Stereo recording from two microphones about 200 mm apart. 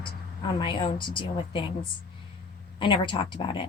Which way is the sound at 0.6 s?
25° left (ahead or behind).